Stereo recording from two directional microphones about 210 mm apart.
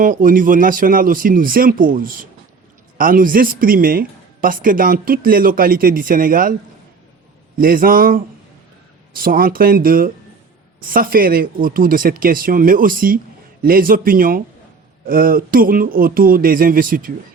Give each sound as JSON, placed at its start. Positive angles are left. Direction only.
{"t": 0.0, "sound": "speech", "side_deg": -40}
{"t": 7.6, "sound": "speech", "side_deg": -40}